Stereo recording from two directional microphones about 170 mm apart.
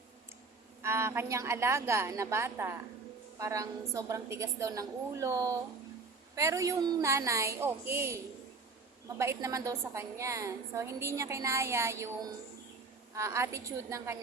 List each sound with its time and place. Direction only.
0.8 s a woman's voice: 15° right (ahead or behind)